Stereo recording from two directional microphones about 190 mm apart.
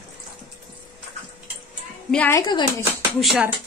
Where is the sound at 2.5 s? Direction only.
20° left (ahead or behind).